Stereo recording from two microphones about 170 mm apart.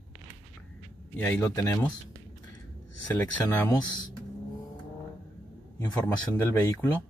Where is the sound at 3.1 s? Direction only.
10° left (ahead or behind).